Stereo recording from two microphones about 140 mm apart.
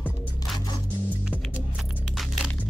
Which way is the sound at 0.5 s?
30° left (ahead or behind).